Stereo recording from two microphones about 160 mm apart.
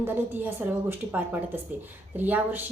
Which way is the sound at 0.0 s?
15° right (ahead or behind).